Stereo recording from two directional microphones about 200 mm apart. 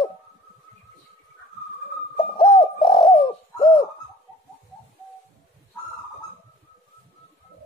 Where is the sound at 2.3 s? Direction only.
25° left (ahead or behind).